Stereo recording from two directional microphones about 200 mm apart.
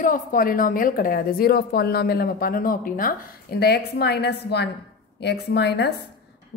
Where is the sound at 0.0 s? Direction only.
45° left (ahead or behind).